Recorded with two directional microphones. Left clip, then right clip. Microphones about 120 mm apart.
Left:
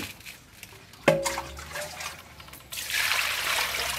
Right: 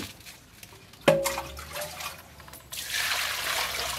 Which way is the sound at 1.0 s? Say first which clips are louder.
Right 1 dB; 10° right (ahead or behind).